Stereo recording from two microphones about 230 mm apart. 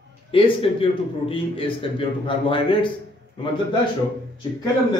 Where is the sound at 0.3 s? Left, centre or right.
Left.